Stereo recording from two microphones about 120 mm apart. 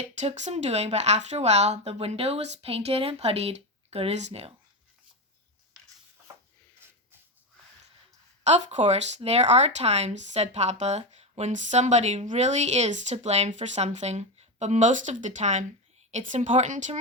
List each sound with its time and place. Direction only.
0.1 s speech: 80° right; by 4.5 s 60° right (ahead or behind)
8.4 s speech: 70° right (ahead or behind)
16.1 s a woman's voice: 90° right